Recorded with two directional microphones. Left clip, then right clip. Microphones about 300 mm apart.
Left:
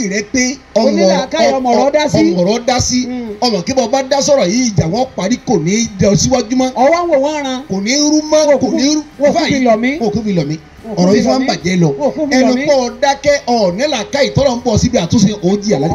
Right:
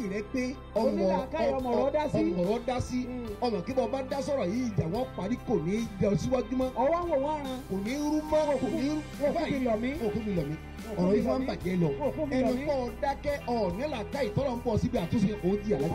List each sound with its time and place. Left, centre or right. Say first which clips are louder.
0.1 s a man's voice: left 17 dB; left